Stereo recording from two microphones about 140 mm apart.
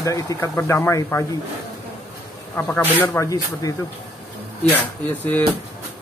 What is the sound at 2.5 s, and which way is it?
Speech, 15° left (ahead or behind).